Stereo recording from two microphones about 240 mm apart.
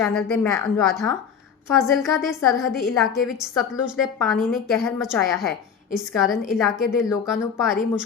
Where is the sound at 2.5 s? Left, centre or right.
Centre.